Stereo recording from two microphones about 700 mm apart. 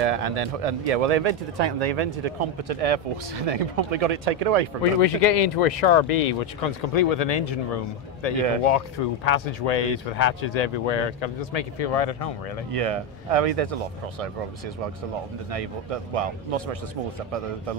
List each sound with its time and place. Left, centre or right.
0.0 s speech: right
5.0 s speech: left
12.7 s speech: right
15.5 s speech: right